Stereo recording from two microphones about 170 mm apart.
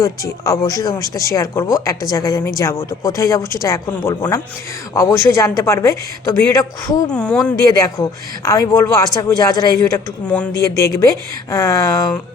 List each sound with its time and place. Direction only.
0.0 s speech: 20° left (ahead or behind)
7.1 s speech: 5° left (ahead or behind)
7.6 s speech: 20° left (ahead or behind)
10.2 s speech: 5° left (ahead or behind)
10.6 s speech: 20° left (ahead or behind)